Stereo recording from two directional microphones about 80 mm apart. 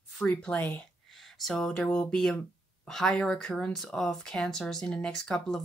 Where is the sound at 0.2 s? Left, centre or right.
Centre.